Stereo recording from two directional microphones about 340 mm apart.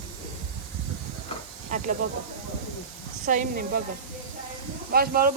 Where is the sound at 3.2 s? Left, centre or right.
Right.